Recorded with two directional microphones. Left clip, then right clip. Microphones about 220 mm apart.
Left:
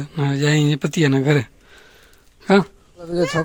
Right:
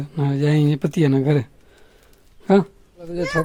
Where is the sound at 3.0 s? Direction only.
25° left (ahead or behind).